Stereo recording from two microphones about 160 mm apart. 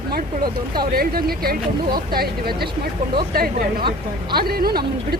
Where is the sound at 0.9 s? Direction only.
70° right (ahead or behind).